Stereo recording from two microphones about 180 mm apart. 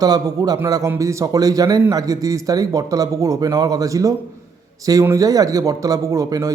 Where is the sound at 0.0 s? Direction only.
20° right (ahead or behind).